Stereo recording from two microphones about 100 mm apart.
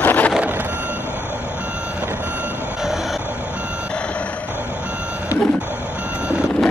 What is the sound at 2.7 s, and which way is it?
Train, 5° right (ahead or behind).